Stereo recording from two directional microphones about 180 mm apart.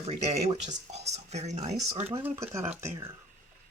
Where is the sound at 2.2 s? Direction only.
15° right (ahead or behind).